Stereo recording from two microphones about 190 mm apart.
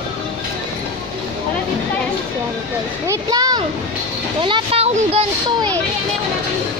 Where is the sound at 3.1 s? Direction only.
20° right (ahead or behind).